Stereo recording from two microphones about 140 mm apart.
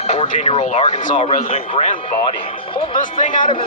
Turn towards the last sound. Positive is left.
turn(degrees=65)  # may be behind; listen again after turning